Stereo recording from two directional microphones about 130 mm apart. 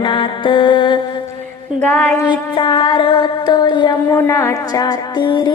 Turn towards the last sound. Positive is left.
turn(degrees=35)  # may be behind; listen again after turning